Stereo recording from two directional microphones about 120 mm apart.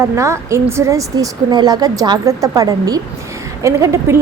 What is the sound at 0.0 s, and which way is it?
A woman's voice, 25° right (ahead or behind).